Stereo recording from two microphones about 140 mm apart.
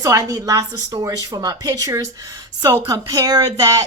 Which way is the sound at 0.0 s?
25° right (ahead or behind).